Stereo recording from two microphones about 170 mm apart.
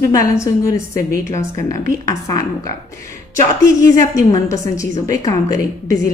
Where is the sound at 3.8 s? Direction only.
20° left (ahead or behind).